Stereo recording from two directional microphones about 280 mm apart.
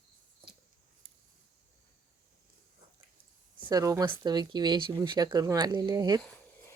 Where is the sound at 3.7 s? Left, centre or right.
Centre.